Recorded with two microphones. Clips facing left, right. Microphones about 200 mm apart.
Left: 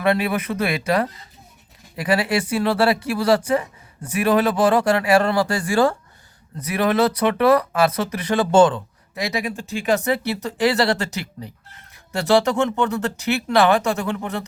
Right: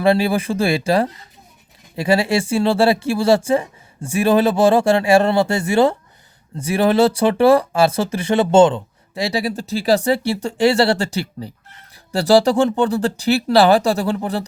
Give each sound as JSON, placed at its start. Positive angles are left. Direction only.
{"t": 0.0, "sound": "speech", "side_deg": -30}